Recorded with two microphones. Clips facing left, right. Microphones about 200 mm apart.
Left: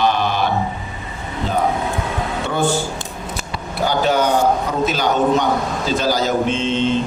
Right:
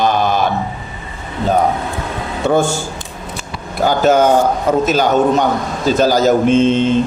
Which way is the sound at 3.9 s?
45° right (ahead or behind).